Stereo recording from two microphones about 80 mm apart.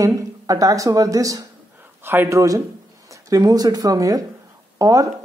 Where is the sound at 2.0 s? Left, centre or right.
Right.